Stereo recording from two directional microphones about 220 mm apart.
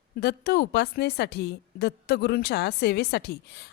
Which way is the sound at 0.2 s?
50° left (ahead or behind).